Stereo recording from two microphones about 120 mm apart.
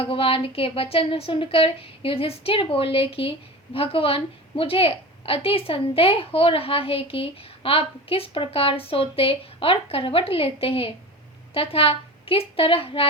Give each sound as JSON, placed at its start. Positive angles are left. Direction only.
{"t": 0.0, "sound": "speech", "side_deg": 50}